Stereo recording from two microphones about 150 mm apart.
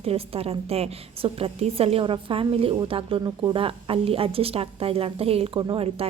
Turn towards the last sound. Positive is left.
turn(degrees=-40)  # may be behind; listen again after turning